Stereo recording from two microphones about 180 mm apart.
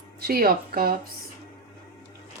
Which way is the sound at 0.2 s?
60° right (ahead or behind).